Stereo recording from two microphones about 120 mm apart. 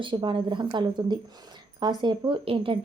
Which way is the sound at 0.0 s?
45° right (ahead or behind).